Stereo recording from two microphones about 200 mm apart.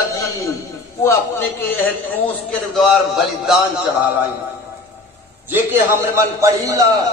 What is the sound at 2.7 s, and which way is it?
Speech, centre (ahead or behind).